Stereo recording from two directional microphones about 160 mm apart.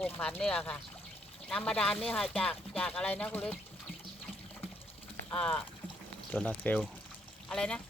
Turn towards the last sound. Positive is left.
turn(degrees=5)  # may be behind; listen again after turning